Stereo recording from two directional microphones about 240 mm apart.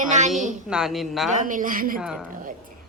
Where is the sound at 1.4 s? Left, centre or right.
Right.